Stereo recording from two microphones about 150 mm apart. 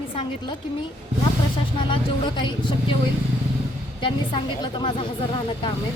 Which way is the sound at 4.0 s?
30° left (ahead or behind).